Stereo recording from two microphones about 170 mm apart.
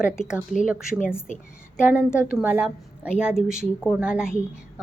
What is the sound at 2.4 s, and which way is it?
A woman's voice, 10° right (ahead or behind).